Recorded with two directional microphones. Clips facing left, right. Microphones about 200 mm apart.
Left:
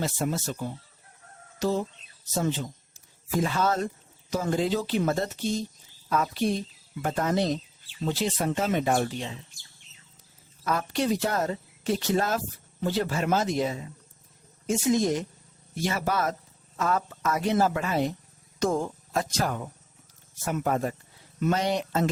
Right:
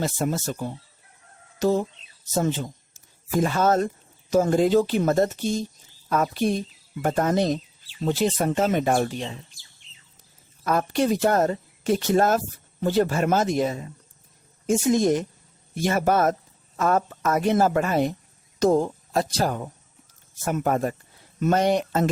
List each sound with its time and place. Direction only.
0.0 s speech: 45° right (ahead or behind)
1.5 s chicken: 50° right (ahead or behind)
2.2 s speech: 50° right (ahead or behind)
10.6 s speech: 50° right (ahead or behind)
18.6 s speech: 35° right (ahead or behind)
20.4 s speech: 50° right (ahead or behind)